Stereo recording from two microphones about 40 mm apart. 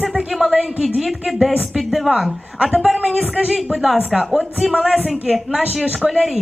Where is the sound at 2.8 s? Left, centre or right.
Centre.